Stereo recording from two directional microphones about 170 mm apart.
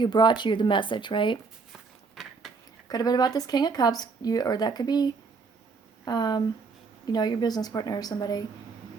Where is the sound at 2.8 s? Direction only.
20° left (ahead or behind).